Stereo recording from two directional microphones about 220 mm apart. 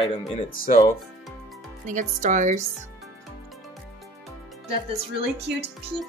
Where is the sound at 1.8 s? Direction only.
35° right (ahead or behind).